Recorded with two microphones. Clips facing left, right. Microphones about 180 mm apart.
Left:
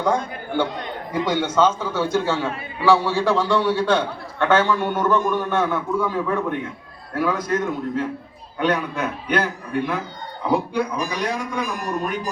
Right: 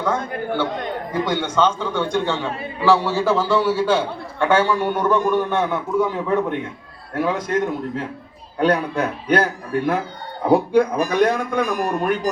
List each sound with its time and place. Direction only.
0.0 s a man's voice: 15° left (ahead or behind); by 7.6 s 25° right (ahead or behind)
8.5 s a man's voice: 35° right (ahead or behind); by 12.3 s 60° right (ahead or behind)